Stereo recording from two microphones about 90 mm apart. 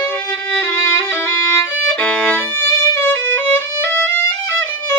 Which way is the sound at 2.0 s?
15° left (ahead or behind).